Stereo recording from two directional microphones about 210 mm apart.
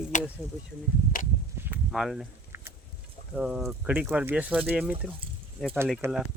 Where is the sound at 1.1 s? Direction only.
40° left (ahead or behind).